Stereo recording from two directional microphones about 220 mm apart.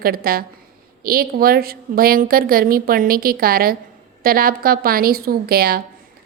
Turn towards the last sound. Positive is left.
turn(degrees=-45)  # may be behind; listen again after turning